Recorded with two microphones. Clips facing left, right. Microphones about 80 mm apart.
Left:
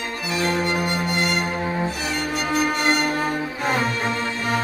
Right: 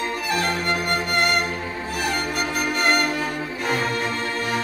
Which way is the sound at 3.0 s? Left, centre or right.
Left.